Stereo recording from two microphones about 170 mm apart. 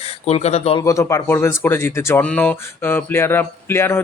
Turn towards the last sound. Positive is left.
turn(degrees=15)  # may be behind; listen again after turning